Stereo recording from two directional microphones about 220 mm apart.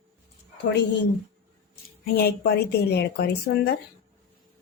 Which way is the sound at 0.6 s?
50° left (ahead or behind).